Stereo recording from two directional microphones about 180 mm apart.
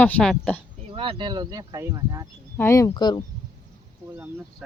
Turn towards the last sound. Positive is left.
turn(degrees=25)  # may be behind; listen again after turning